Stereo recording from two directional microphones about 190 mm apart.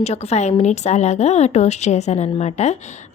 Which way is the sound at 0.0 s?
35° left (ahead or behind).